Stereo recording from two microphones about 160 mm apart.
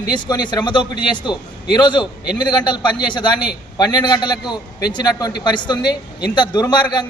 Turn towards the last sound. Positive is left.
turn(degrees=25)  # may be behind; listen again after turning